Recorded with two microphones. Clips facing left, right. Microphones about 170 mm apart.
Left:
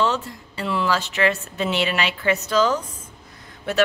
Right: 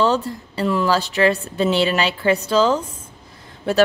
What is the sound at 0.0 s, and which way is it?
A woman's voice, 35° right (ahead or behind).